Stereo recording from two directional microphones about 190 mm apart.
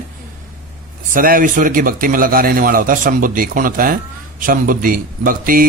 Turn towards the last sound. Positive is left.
turn(degrees=-45)  # may be behind; listen again after turning